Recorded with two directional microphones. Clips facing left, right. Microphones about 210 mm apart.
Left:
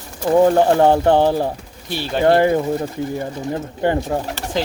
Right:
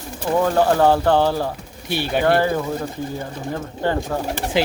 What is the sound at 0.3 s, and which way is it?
Speech, 25° left (ahead or behind).